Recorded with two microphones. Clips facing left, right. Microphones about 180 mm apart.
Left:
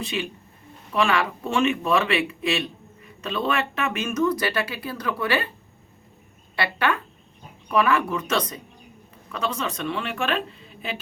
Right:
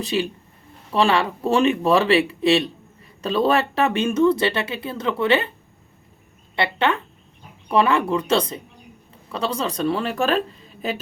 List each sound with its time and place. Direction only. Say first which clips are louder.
0.0 s speech: right 6 dB; 35° right (ahead or behind)
6.6 s speech: right 3 dB; 25° right (ahead or behind); by 11.0 s 40° right (ahead or behind)